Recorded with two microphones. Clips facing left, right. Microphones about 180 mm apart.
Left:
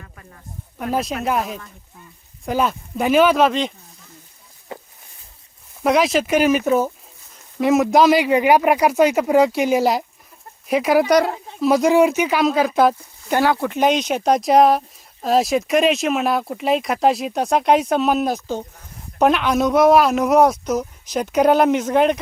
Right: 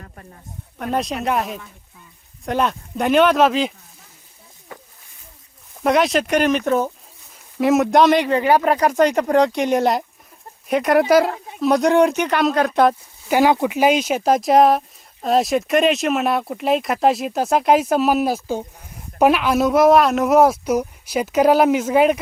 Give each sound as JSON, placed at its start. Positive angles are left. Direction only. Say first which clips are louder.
{"t": 0.8, "sound": "speech", "louder": "even", "side_deg": 5}
{"t": 5.8, "sound": "speech", "louder": "even", "side_deg": 0}
{"t": 13.3, "sound": "speech", "louder": "right 2 dB", "side_deg": -15}